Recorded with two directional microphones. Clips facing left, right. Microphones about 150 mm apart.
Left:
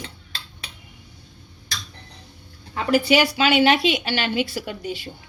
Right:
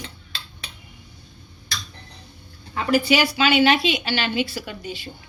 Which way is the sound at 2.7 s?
60° left (ahead or behind).